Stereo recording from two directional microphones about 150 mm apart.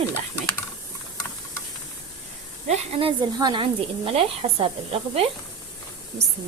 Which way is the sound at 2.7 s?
35° right (ahead or behind).